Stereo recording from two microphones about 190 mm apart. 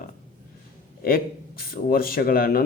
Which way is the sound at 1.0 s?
50° left (ahead or behind).